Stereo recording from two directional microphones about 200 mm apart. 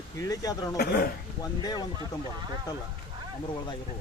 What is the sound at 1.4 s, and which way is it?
Speech, 20° left (ahead or behind).